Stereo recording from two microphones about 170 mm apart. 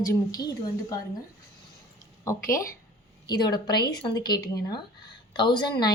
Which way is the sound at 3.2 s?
25° left (ahead or behind).